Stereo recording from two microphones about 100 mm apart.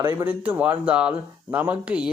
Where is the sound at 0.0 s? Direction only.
25° right (ahead or behind).